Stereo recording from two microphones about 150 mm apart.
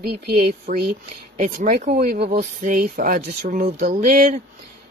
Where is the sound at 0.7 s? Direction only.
60° right (ahead or behind).